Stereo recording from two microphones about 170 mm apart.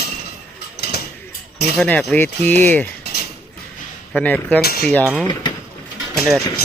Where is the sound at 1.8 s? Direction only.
5° left (ahead or behind).